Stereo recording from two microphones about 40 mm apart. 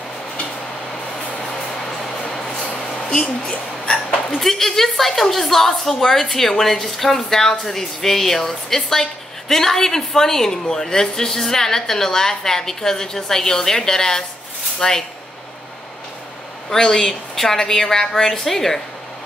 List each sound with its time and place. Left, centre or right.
1.4 s music: centre
2.3 s a sound: centre
3.1 s a woman's voice: left
4.3 s a woman's voice: centre
16.7 s a woman's voice: centre